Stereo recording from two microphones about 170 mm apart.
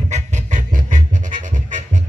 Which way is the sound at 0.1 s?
50° right (ahead or behind).